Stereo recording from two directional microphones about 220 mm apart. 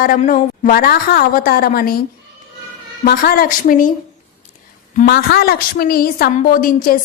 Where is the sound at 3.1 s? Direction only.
40° left (ahead or behind).